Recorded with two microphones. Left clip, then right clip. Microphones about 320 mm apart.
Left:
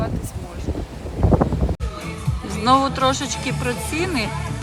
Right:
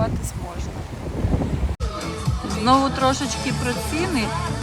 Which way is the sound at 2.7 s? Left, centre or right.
Centre.